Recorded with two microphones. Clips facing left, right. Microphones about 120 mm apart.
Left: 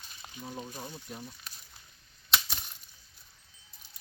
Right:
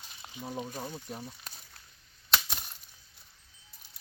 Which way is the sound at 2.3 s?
Centre (ahead or behind).